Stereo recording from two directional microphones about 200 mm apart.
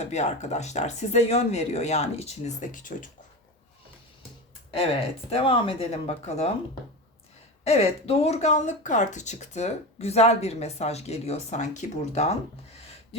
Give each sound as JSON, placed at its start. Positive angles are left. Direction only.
{"t": 0.0, "sound": "speech", "side_deg": 35}
{"t": 4.9, "sound": "speech", "side_deg": 30}
{"t": 7.6, "sound": "speech", "side_deg": 30}